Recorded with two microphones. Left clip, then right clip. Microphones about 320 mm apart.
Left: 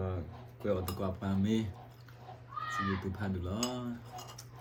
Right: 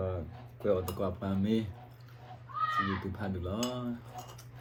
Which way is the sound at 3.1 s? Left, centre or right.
Centre.